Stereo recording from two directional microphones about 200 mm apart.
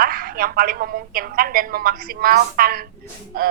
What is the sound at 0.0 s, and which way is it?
A woman's voice, 50° right (ahead or behind).